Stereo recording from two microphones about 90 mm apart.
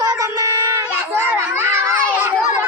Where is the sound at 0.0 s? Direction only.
40° right (ahead or behind).